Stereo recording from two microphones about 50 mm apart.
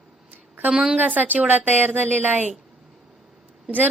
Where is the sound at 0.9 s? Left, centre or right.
Right.